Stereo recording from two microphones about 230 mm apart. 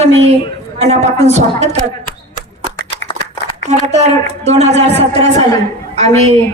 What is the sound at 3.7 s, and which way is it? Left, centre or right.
A woman's voice, right.